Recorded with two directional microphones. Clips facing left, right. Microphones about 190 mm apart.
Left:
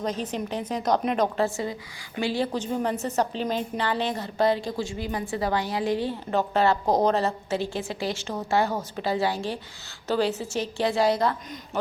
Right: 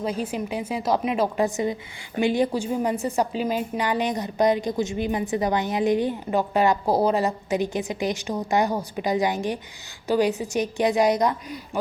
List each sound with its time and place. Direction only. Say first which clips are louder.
0.0 s a woman's voice: right 2 dB; 10° right (ahead or behind)